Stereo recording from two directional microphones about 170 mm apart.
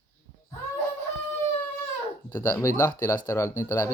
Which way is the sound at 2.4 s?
20° left (ahead or behind).